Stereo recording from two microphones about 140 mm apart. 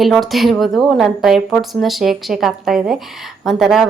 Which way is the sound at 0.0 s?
Centre (ahead or behind).